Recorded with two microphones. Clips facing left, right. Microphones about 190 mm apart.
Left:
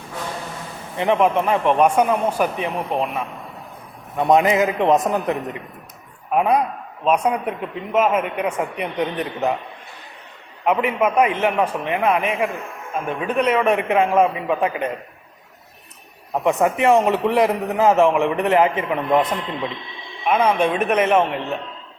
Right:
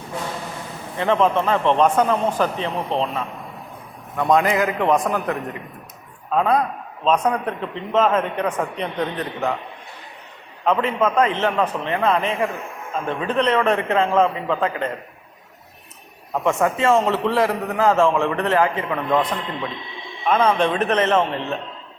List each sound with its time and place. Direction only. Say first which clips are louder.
0.9 s a man's voice: left 1 dB; 15° left (ahead or behind)
10.6 s a man's voice: left 1 dB; 15° left (ahead or behind)
16.3 s a man's voice: left 1 dB; 20° left (ahead or behind)